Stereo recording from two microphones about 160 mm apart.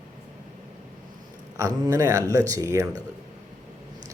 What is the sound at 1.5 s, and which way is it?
Speech, 20° right (ahead or behind).